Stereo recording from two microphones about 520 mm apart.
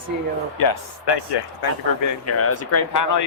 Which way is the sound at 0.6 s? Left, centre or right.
Left.